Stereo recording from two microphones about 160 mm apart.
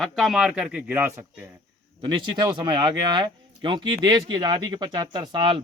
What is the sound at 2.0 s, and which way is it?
Speech, 30° right (ahead or behind).